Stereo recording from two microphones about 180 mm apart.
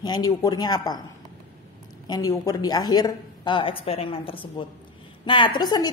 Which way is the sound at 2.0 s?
20° left (ahead or behind).